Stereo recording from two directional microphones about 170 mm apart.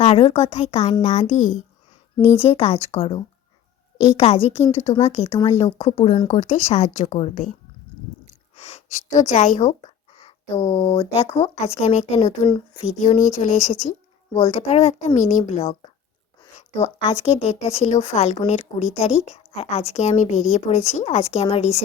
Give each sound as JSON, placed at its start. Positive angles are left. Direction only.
{"t": 0.0, "sound": "a woman's voice", "side_deg": 35}
{"t": 4.2, "sound": "a woman's voice", "side_deg": 35}
{"t": 8.5, "sound": "a sound", "side_deg": 40}
{"t": 10.2, "sound": "a woman's voice", "side_deg": 35}